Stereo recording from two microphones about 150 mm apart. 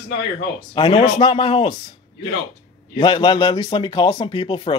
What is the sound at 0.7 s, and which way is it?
Speech, 35° left (ahead or behind).